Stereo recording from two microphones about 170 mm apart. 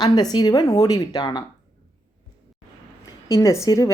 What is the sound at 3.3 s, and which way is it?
Speech, 15° left (ahead or behind).